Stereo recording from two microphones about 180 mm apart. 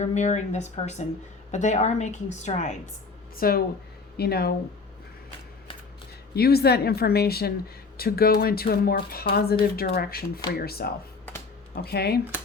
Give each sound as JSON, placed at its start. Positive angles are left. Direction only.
{"t": 0.0, "sound": "speech", "side_deg": 40}
{"t": 3.3, "sound": "speech", "side_deg": 55}
{"t": 6.3, "sound": "speech", "side_deg": 60}